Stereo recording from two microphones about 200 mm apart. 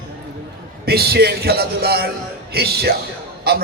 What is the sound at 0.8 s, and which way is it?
A man's voice, 50° right (ahead or behind).